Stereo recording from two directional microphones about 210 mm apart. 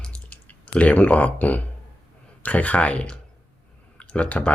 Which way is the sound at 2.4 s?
5° left (ahead or behind).